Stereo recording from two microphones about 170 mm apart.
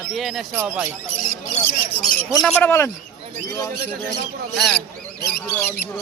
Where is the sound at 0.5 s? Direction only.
10° right (ahead or behind).